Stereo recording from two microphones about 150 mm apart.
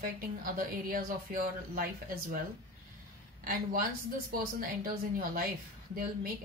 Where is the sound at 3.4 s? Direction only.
70° right (ahead or behind).